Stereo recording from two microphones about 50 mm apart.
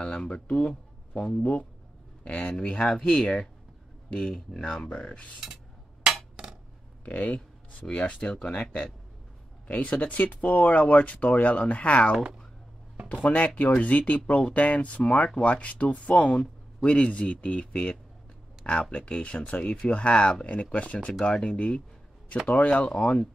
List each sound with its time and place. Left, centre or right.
0.0 s a sound: centre
0.3 s speech: left
2.5 s speech: centre
4.8 s speech: left
7.1 s speech: left
21.1 s speech: centre